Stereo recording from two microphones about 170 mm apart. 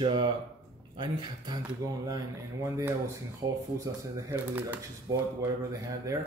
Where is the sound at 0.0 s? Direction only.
30° right (ahead or behind).